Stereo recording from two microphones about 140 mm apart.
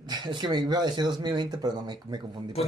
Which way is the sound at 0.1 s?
30° right (ahead or behind).